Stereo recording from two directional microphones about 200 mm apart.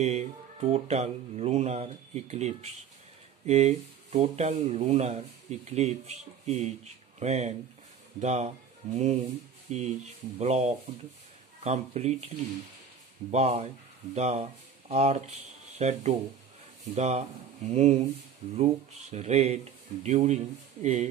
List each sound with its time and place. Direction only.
0.0 s speech: 35° right (ahead or behind)